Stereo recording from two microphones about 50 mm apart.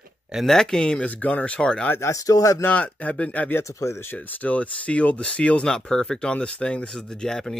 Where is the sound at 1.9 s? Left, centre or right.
Left.